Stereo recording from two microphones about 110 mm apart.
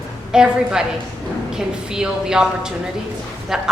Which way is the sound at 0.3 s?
5° right (ahead or behind).